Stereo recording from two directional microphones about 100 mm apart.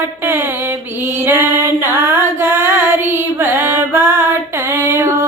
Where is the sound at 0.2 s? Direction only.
20° right (ahead or behind).